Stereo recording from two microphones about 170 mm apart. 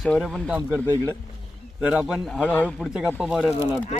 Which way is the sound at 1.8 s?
5° right (ahead or behind).